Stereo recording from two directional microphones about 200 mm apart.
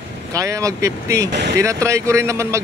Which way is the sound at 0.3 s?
15° right (ahead or behind).